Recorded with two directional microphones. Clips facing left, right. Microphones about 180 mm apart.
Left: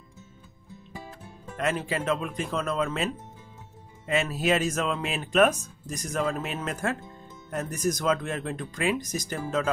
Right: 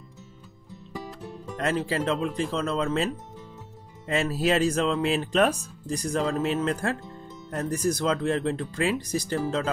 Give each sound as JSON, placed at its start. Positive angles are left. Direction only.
{"t": 1.6, "sound": "speech", "side_deg": -35}
{"t": 4.1, "sound": "speech", "side_deg": -35}